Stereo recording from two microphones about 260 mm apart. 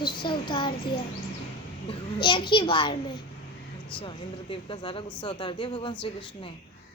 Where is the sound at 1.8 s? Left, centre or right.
Centre.